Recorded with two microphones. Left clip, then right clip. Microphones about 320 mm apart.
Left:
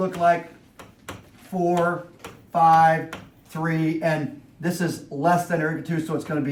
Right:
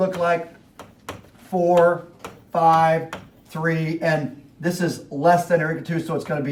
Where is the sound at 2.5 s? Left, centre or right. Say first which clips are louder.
Even; centre.